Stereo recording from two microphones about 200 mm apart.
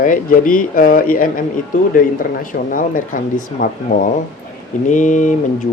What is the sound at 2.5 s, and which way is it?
Speech, 40° left (ahead or behind).